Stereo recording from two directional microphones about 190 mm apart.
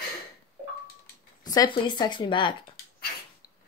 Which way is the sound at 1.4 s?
20° left (ahead or behind).